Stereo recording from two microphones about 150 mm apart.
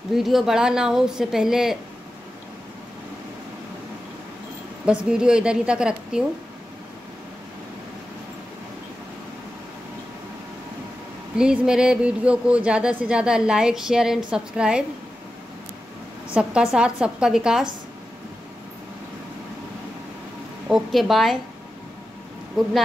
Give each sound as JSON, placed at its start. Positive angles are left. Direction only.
{"t": 0.1, "sound": "speech", "side_deg": 0}
{"t": 4.8, "sound": "speech", "side_deg": -5}
{"t": 11.3, "sound": "speech", "side_deg": -5}
{"t": 16.3, "sound": "speech", "side_deg": -5}
{"t": 20.6, "sound": "speech", "side_deg": 0}